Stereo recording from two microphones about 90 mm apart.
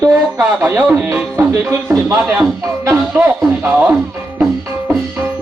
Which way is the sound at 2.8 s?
35° right (ahead or behind).